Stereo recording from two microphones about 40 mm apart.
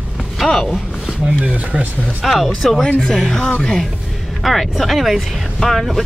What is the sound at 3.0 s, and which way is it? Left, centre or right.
Speech, centre.